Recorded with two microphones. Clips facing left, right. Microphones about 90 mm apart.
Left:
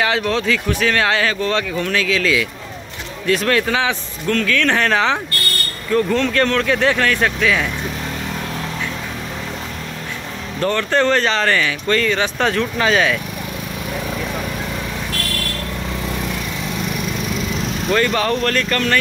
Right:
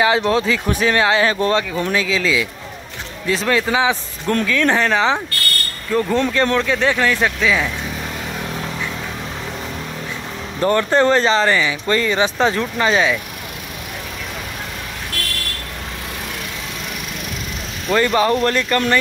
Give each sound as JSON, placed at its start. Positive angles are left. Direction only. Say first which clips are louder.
{"t": 0.0, "sound": "speech", "louder": "right 3 dB", "side_deg": -20}
{"t": 3.4, "sound": "speech", "louder": "right 4 dB", "side_deg": -10}
{"t": 10.6, "sound": "speech", "louder": "right 2 dB", "side_deg": -20}
{"t": 17.9, "sound": "speech", "louder": "right 3 dB", "side_deg": -20}